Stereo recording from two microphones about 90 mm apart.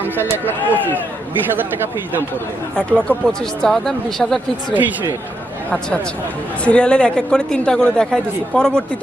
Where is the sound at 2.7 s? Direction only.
10° left (ahead or behind).